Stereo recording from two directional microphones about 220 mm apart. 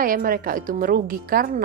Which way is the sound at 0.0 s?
40° right (ahead or behind).